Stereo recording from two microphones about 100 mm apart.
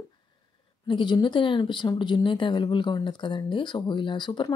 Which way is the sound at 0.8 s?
50° left (ahead or behind).